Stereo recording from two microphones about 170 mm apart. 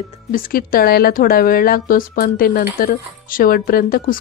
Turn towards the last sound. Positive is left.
turn(degrees=60)  # may be behind; listen again after turning